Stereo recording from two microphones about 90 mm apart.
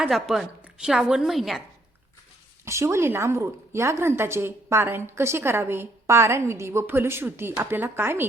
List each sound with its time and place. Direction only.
0.1 s a woman's voice: centre (ahead or behind)
2.6 s a woman's voice: 30° right (ahead or behind)